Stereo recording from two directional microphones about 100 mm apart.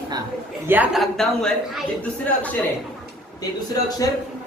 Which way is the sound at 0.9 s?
5° left (ahead or behind).